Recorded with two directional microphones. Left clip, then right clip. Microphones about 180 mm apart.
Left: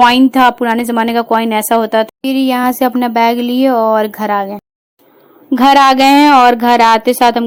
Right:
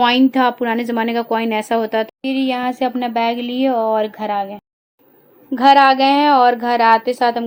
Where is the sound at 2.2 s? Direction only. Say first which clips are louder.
Left 6 dB; 30° left (ahead or behind).